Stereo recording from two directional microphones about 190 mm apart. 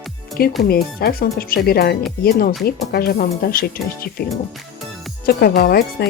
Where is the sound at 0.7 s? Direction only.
55° left (ahead or behind).